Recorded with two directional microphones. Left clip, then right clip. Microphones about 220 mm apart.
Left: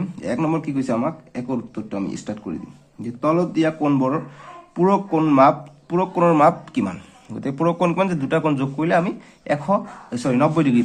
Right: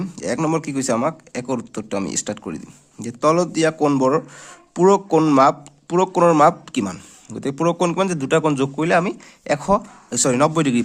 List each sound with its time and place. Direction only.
0.0 s speech: 30° right (ahead or behind)